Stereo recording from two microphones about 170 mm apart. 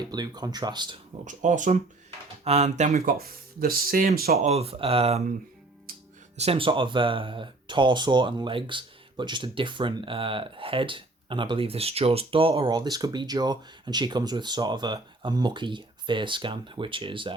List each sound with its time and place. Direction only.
0.1 s speech: 25° right (ahead or behind)
1.2 s speech: 45° right (ahead or behind)
3.2 s speech: 60° right (ahead or behind)
4.4 s speech: 35° right (ahead or behind)
6.3 s speech: 35° right (ahead or behind)